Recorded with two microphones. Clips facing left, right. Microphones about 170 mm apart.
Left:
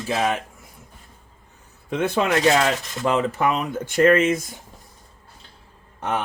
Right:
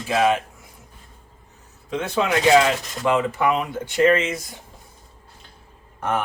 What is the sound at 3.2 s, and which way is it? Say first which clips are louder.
Speech: even; 40° left (ahead or behind).